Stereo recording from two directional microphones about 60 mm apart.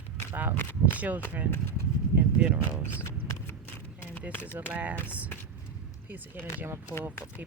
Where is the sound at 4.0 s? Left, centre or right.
Left.